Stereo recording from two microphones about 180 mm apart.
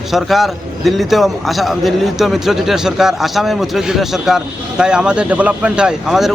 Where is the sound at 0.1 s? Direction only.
Centre (ahead or behind).